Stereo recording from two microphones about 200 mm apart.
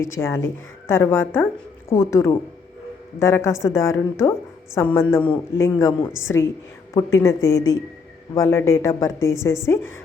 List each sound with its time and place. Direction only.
0.2 s a woman's voice: 15° left (ahead or behind)